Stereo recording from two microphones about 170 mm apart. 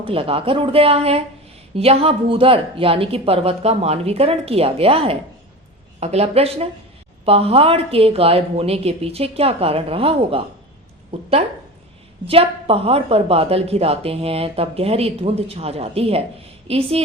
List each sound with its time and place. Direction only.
0.0 s a woman's voice: 35° right (ahead or behind)
12.2 s a woman's voice: 35° right (ahead or behind)